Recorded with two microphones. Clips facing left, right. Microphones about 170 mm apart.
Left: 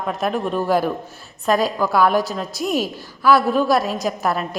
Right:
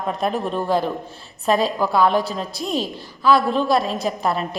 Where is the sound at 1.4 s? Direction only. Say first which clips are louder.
Even; 30° right (ahead or behind).